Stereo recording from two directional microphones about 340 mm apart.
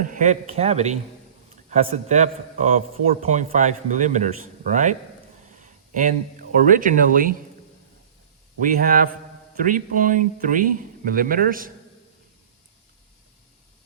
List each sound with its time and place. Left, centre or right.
0.0 s a man's voice: right
8.6 s a man's voice: right